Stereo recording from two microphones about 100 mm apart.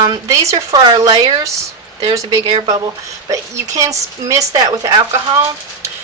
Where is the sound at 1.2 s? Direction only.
40° right (ahead or behind).